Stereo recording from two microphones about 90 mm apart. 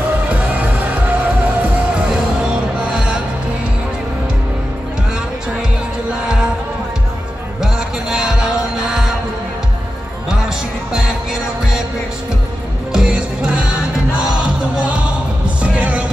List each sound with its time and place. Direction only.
0.3 s music: 15° right (ahead or behind)
7.6 s music: 5° right (ahead or behind)
12.9 s music: 5° right (ahead or behind)